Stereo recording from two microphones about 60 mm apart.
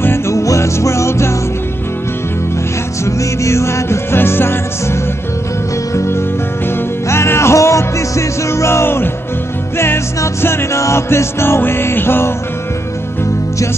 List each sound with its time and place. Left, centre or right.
0.3 s music: left
3.1 s music: left
5.9 s music: left